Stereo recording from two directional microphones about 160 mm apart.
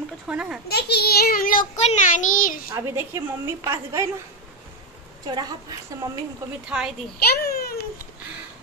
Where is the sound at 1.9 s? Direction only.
55° left (ahead or behind).